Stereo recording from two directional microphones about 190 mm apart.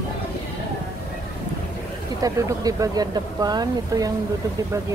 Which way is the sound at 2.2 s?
20° right (ahead or behind).